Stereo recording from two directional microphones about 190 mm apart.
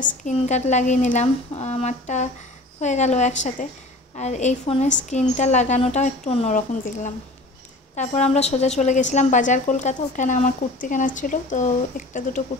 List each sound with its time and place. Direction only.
0.0 s speech: 40° left (ahead or behind)